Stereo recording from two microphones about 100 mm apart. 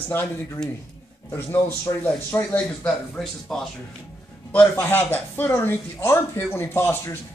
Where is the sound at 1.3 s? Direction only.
25° left (ahead or behind); by 3.6 s 10° left (ahead or behind).